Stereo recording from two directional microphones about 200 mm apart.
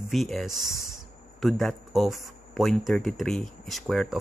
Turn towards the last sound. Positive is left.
turn(degrees=0)  # may be behind; listen again after turning